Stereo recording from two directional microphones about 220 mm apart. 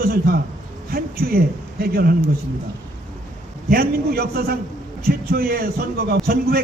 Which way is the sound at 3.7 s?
45° right (ahead or behind).